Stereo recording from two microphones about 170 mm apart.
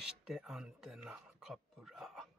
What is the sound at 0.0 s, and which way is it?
Speech, 5° right (ahead or behind).